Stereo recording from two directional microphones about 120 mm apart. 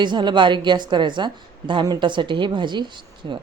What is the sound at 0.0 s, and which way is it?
A woman's voice, 40° right (ahead or behind).